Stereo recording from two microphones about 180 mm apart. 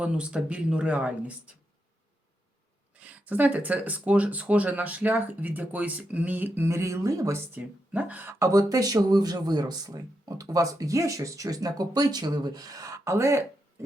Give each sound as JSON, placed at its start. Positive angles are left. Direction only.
{"t": 0.0, "sound": "speech", "side_deg": -5}
{"t": 3.0, "sound": "speech", "side_deg": -10}